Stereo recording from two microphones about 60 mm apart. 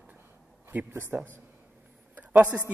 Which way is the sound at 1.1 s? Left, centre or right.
Right.